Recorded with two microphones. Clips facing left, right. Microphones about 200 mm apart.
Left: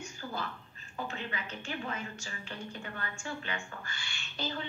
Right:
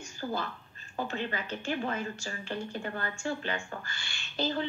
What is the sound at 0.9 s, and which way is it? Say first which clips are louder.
Speech: right 5 dB; 35° right (ahead or behind).